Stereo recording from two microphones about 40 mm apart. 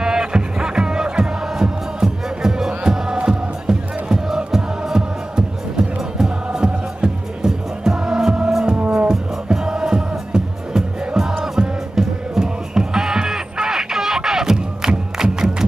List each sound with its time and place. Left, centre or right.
0.0 s music: centre